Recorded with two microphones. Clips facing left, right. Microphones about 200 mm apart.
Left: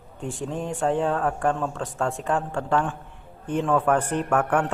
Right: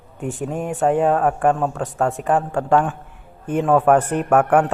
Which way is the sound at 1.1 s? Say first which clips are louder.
Right 6 dB; 65° right (ahead or behind).